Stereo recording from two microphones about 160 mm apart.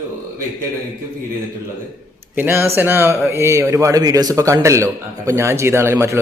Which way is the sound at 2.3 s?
15° right (ahead or behind).